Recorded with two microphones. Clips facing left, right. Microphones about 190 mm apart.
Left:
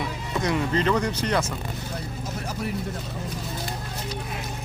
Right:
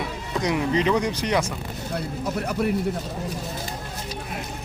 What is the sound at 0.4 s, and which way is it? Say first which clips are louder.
Speech: right 2 dB; 15° right (ahead or behind).